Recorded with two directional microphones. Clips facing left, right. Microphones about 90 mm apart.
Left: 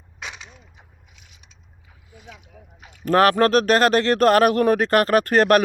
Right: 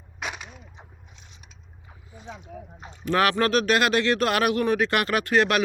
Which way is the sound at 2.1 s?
30° right (ahead or behind).